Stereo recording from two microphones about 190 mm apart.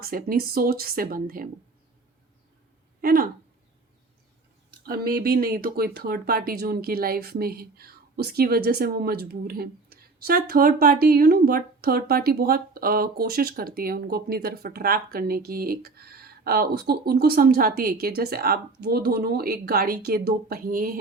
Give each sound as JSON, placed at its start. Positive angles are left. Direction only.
{"t": 0.0, "sound": "speech", "side_deg": -50}
{"t": 3.0, "sound": "speech", "side_deg": -50}
{"t": 4.9, "sound": "speech", "side_deg": -55}